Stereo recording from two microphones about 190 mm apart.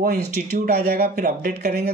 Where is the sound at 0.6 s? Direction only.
55° right (ahead or behind).